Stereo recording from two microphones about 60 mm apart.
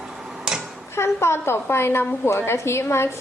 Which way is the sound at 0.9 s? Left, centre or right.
Left.